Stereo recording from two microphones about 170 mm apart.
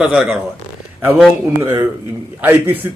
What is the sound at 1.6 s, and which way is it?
Speech, 15° right (ahead or behind).